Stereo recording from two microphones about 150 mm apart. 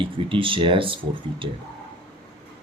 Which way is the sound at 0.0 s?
35° right (ahead or behind).